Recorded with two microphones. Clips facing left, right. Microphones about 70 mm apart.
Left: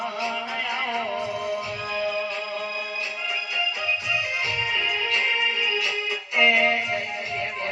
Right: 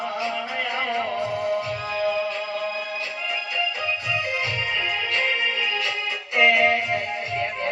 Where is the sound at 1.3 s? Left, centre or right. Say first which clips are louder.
Right 3 dB; right.